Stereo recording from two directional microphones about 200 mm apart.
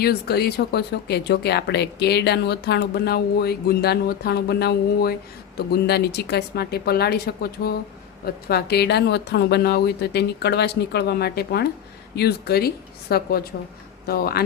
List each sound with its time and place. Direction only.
0.0 s speech: 50° left (ahead or behind)